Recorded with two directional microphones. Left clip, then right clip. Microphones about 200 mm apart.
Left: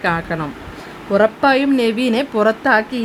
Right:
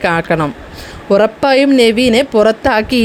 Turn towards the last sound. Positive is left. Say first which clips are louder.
# right 3 dB
turn(degrees=-35)  # may be behind; listen again after turning